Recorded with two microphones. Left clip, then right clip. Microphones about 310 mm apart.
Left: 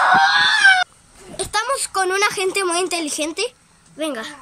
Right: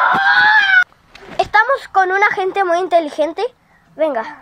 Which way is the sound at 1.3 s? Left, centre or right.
Centre.